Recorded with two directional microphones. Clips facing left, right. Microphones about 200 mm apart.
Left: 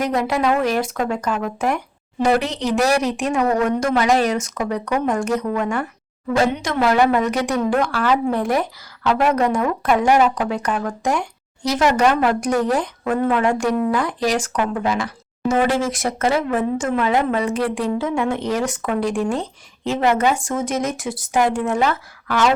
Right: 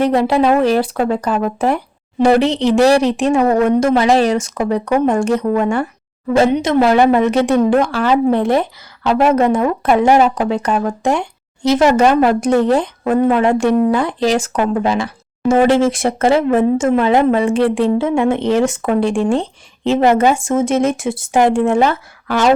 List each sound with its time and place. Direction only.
0.0 s speech: 30° right (ahead or behind)